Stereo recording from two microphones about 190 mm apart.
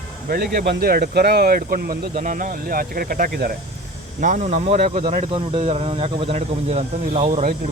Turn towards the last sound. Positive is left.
turn(degrees=-30)  # may be behind; listen again after turning